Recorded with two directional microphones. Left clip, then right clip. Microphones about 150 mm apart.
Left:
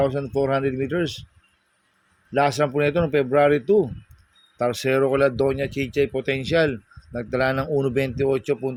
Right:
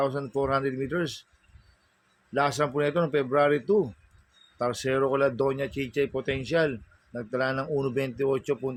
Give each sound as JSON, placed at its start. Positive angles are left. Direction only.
{"t": 0.0, "sound": "speech", "side_deg": 45}
{"t": 2.3, "sound": "speech", "side_deg": 50}